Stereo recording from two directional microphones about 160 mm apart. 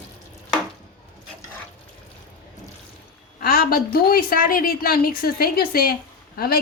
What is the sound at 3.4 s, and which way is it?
A woman's voice, 70° left (ahead or behind).